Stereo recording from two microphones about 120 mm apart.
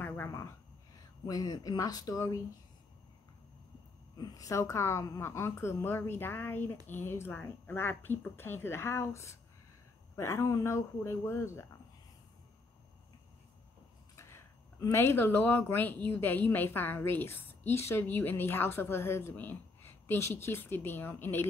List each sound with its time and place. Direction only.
0.0 s a sound: 15° left (ahead or behind)
0.3 s speech: 25° left (ahead or behind)
4.2 s speech: 30° left (ahead or behind)
14.1 s speech: 25° left (ahead or behind)